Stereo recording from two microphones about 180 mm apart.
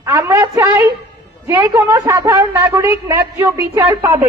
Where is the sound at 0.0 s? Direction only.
15° right (ahead or behind).